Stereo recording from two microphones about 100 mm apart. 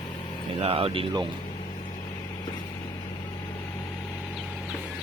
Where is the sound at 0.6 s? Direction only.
70° right (ahead or behind).